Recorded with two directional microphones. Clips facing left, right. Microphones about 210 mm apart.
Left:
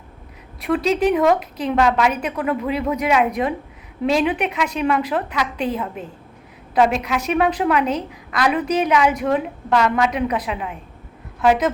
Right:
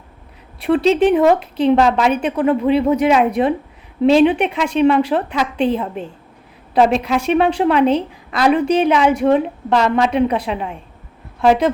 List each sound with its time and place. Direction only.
0.6 s a woman's voice: 30° right (ahead or behind)